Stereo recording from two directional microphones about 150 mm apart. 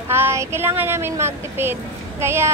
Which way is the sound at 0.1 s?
15° right (ahead or behind).